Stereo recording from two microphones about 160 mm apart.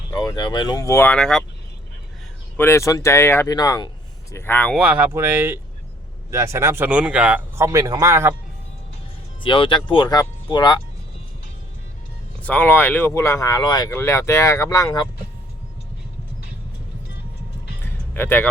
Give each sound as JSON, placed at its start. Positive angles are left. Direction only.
{"t": 0.1, "sound": "speech", "side_deg": 25}
{"t": 2.6, "sound": "speech", "side_deg": 15}
{"t": 4.8, "sound": "speech", "side_deg": -10}
{"t": 9.4, "sound": "speech", "side_deg": 30}
{"t": 12.4, "sound": "speech", "side_deg": 10}
{"t": 18.1, "sound": "a man's voice", "side_deg": 10}